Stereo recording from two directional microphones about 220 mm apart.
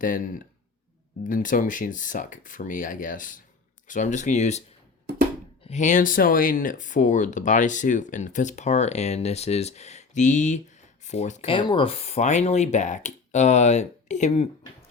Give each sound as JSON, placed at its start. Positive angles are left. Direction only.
{"t": 0.0, "sound": "speech", "side_deg": 35}
{"t": 5.6, "sound": "speech", "side_deg": 35}